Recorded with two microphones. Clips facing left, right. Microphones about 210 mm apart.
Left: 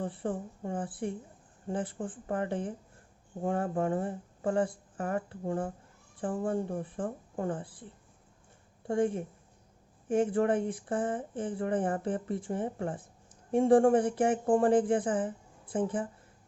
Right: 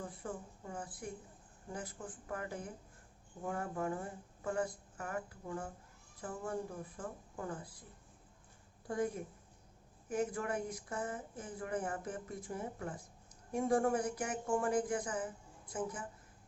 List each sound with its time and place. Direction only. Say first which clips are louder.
0.0 s speech: left 10 dB; 30° left (ahead or behind)
5.4 s speech: left 10 dB; 50° left (ahead or behind)
6.4 s speech: left 7 dB; 30° left (ahead or behind)
8.9 s speech: left 8 dB; 30° left (ahead or behind)